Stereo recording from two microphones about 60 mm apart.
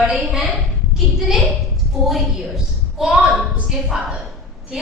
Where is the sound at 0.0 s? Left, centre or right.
Centre.